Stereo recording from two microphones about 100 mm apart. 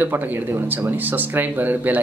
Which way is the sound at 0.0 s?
20° right (ahead or behind).